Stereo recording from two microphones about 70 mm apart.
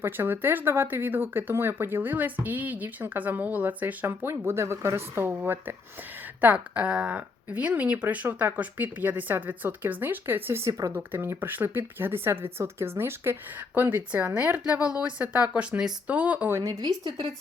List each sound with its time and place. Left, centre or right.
0.0 s speech: right
5.3 s speech: right
10.6 s speech: right
10.9 s speech: right
16.5 s speech: right
16.8 s speech: right